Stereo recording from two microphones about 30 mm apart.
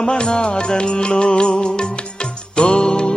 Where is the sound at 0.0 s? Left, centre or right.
Left.